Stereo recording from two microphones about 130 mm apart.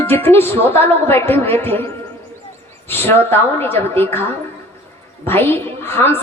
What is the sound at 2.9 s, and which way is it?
Speech, 15° left (ahead or behind).